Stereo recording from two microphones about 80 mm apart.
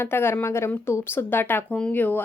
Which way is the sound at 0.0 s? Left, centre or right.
Left.